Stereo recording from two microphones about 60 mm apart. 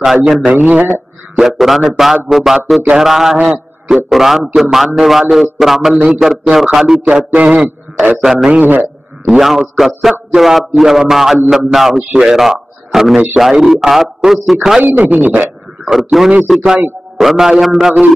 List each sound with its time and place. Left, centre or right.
0.5 s a man's voice: right
1.3 s a man's voice: centre
7.0 s a man's voice: right
8.2 s a man's voice: centre
8.5 s a man's voice: right
9.2 s a man's voice: centre
14.8 s a man's voice: right
15.8 s a man's voice: centre